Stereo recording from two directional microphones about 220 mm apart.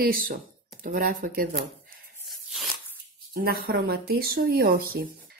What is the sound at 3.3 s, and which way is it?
Speech, 40° right (ahead or behind).